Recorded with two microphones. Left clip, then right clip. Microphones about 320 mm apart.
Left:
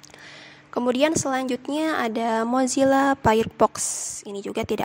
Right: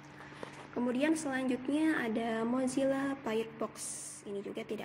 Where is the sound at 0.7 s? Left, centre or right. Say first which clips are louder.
Left 11 dB; left.